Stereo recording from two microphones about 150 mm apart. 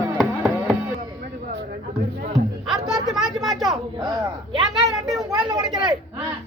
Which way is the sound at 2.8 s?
5° right (ahead or behind).